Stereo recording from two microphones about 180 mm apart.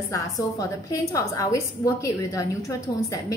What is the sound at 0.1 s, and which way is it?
A woman's voice, 15° left (ahead or behind).